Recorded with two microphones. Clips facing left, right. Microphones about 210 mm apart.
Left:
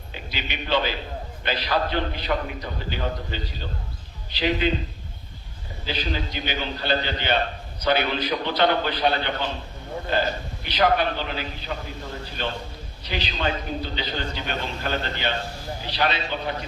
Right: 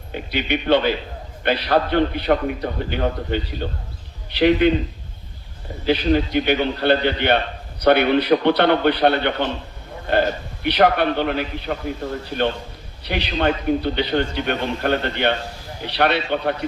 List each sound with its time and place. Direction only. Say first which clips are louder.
0.1 s a man's voice: right 11 dB; 60° right (ahead or behind)
5.8 s a man's voice: right 11 dB; 60° right (ahead or behind)
13.1 s a man's voice: right 7 dB; 60° right (ahead or behind)